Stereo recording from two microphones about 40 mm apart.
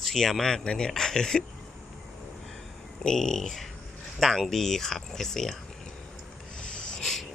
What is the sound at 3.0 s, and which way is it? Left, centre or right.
Speech, centre.